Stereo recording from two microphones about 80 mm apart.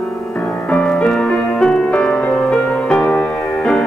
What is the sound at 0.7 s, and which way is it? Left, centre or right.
Music, centre.